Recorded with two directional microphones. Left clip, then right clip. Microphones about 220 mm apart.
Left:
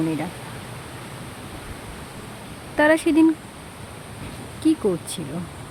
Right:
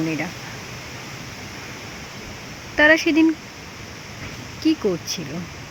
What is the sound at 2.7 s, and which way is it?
Speech, 5° left (ahead or behind).